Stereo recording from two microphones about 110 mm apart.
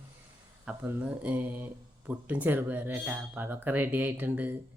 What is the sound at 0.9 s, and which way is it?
Speech, 10° right (ahead or behind).